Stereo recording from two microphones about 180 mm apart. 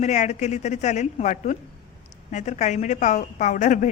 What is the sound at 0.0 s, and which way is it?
A woman's voice, 40° left (ahead or behind).